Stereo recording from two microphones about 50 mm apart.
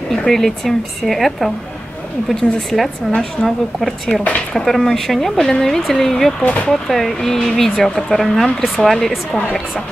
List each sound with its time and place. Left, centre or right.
0.1 s speech: centre
4.1 s speech: left
4.6 s speech: centre
6.4 s speech: left
6.7 s speech: centre